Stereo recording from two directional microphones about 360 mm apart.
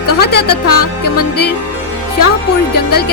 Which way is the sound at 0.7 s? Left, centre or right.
Left.